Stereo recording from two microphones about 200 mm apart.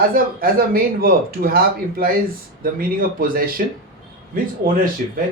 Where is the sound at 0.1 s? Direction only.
45° right (ahead or behind).